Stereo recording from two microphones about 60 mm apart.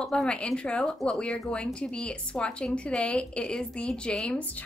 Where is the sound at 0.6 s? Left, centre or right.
Centre.